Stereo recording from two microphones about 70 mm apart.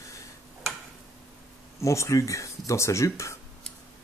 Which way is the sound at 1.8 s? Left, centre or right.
Left.